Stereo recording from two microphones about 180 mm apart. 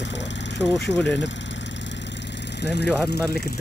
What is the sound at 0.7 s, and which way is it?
Speech, 10° left (ahead or behind).